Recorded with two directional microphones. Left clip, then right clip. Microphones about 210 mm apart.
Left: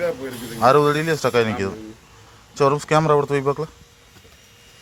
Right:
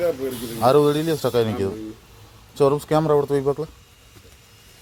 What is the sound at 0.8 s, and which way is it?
Speech, 10° right (ahead or behind).